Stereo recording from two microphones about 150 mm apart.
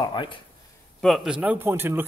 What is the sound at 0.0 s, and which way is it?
Speech, 30° left (ahead or behind).